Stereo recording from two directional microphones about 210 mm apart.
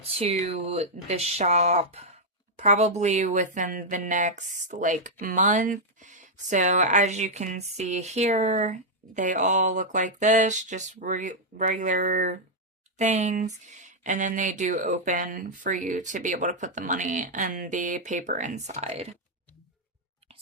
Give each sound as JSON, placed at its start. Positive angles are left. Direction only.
{"t": 0.2, "sound": "speech", "side_deg": -30}